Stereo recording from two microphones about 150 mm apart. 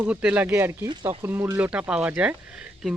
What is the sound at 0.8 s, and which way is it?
Speech, 30° right (ahead or behind).